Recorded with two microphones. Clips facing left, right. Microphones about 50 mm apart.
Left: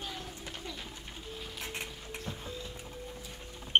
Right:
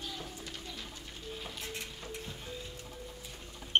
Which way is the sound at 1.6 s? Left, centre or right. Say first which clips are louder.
Left 2 dB; left.